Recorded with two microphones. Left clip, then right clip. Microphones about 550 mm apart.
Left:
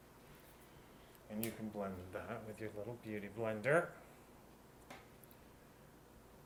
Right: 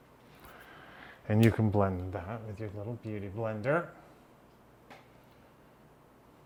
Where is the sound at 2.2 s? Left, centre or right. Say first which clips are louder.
Right 5 dB; right.